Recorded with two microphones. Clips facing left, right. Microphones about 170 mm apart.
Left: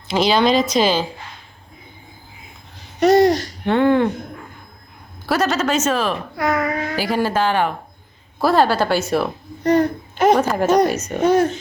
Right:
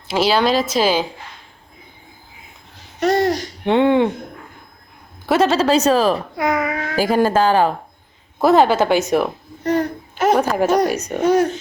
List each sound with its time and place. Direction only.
0.1 s a woman's voice: 5° right (ahead or behind)
3.0 s a woman's voice: centre (ahead or behind)
3.3 s speech: 20° right (ahead or behind)
5.2 s a woman's voice: 25° right (ahead or behind)
6.4 s speech: 10° right (ahead or behind)
7.0 s speech: 45° right (ahead or behind)
8.4 s speech: 20° right (ahead or behind)